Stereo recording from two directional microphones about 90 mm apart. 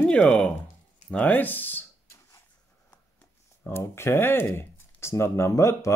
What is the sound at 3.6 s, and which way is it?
Speech, 30° left (ahead or behind).